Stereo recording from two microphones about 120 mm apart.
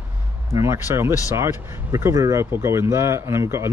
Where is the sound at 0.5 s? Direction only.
25° right (ahead or behind).